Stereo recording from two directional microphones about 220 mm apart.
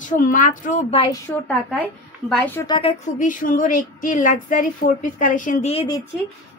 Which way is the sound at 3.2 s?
40° left (ahead or behind).